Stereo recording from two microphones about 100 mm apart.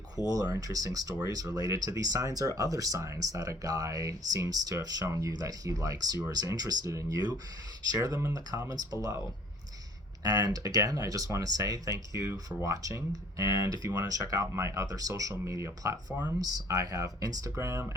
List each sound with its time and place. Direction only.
0.3 s speech: 35° right (ahead or behind)
10.2 s speech: 40° right (ahead or behind)